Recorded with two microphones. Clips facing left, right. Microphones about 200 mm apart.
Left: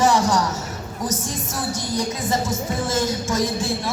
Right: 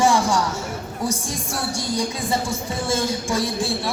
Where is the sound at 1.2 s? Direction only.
10° right (ahead or behind).